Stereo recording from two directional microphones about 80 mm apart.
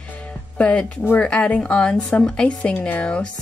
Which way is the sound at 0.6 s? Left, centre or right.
Centre.